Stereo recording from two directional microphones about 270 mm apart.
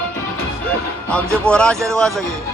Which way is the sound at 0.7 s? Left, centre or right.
Centre.